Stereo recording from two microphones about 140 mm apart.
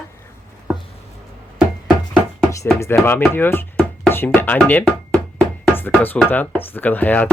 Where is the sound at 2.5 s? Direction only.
20° left (ahead or behind).